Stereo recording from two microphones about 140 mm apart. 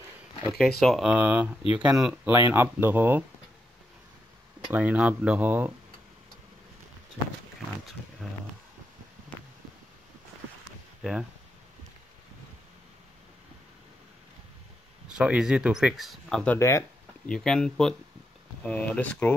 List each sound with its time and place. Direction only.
0.5 s speech: centre (ahead or behind)
2.2 s speech: 15° right (ahead or behind)
4.7 s speech: 10° right (ahead or behind)
8.2 s speech: centre (ahead or behind)
9.3 s a sound: 10° left (ahead or behind)
15.1 s speech: 5° right (ahead or behind)
16.5 s speech: 20° left (ahead or behind)
17.3 s speech: 5° left (ahead or behind)